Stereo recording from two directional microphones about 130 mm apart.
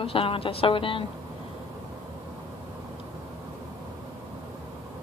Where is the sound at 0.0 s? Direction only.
45° left (ahead or behind).